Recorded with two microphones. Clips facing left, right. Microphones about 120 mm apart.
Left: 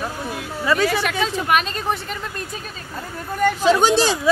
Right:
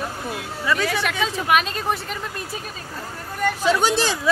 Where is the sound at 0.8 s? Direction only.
Centre (ahead or behind).